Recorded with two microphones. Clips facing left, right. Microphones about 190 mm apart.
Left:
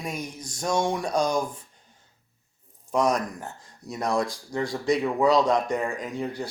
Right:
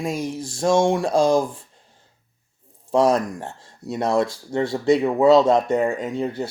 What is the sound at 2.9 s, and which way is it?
Speech, 30° right (ahead or behind).